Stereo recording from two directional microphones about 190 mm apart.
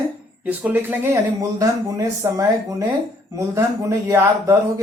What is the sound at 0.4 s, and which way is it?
Speech, 10° right (ahead or behind).